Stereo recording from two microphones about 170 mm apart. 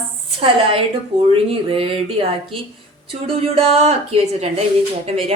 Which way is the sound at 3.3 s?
35° right (ahead or behind).